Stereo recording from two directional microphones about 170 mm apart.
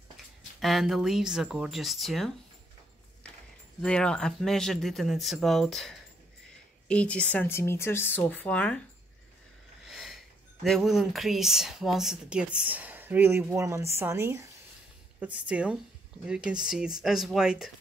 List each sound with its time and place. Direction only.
0.6 s speech: centre (ahead or behind)
3.8 s speech: 5° left (ahead or behind)
9.8 s speech: centre (ahead or behind)